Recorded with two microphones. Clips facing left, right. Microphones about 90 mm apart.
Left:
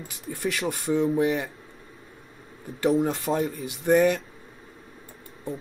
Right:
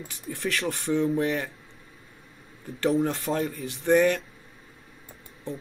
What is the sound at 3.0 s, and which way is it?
Speech, 20° left (ahead or behind).